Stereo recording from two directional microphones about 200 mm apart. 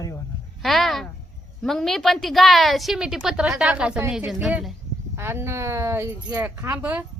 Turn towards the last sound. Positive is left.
turn(degrees=-10)  # may be behind; listen again after turning